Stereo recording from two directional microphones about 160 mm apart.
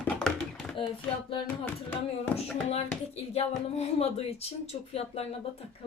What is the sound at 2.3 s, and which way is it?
Speech, 40° left (ahead or behind).